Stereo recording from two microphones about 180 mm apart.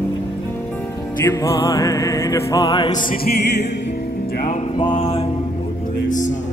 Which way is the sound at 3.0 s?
55° left (ahead or behind).